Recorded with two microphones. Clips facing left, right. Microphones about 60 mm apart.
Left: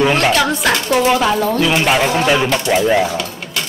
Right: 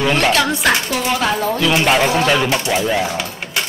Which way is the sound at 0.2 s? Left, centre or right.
Centre.